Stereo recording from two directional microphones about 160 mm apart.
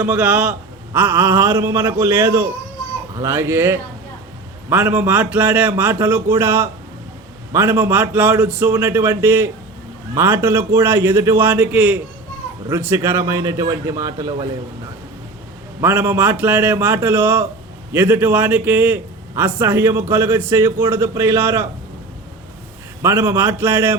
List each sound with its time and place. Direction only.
0.0 s a man's voice: 10° right (ahead or behind)
15.8 s a man's voice: 15° right (ahead or behind)
23.0 s a man's voice: 15° right (ahead or behind)